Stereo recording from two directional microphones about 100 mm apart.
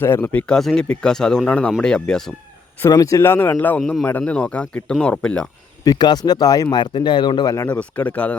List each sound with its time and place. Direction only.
0.0 s speech: 20° left (ahead or behind)
2.9 s speech: 35° left (ahead or behind)
3.8 s speech: 5° left (ahead or behind)
5.8 s speech: 45° left (ahead or behind)
7.7 s speech: 15° left (ahead or behind)